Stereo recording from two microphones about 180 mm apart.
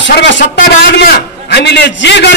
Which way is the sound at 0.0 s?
85° left.